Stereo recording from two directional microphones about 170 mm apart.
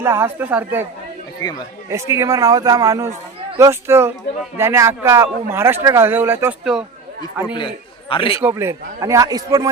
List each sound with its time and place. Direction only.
0.0 s a man's voice: 15° right (ahead or behind)
1.4 s speech: 20° left (ahead or behind)
1.9 s a man's voice: 15° right (ahead or behind)
8.1 s a man's voice: 30° left (ahead or behind)
8.4 s a man's voice: 15° right (ahead or behind)